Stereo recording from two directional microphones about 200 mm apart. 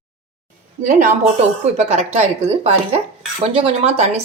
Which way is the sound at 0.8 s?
40° right (ahead or behind).